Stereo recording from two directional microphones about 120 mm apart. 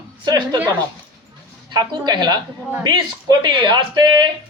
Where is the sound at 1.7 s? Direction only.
35° right (ahead or behind).